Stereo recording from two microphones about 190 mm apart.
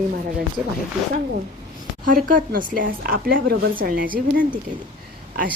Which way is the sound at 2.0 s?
45° right (ahead or behind).